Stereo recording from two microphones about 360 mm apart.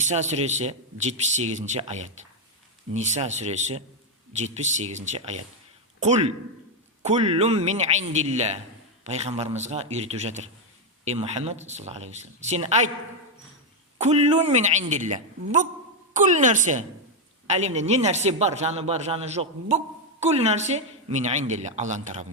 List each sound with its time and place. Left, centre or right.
0.0 s a woman's voice: centre
14.0 s a woman's voice: centre